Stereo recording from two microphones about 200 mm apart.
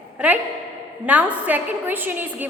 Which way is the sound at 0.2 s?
10° right (ahead or behind).